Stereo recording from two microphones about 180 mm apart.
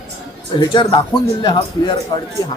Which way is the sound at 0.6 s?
25° left (ahead or behind).